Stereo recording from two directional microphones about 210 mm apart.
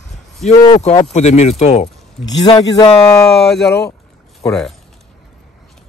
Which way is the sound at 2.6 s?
20° left (ahead or behind).